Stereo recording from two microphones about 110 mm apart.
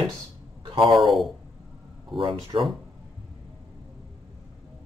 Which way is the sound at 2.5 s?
55° right (ahead or behind).